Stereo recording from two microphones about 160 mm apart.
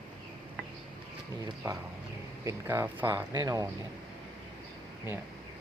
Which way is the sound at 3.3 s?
25° right (ahead or behind).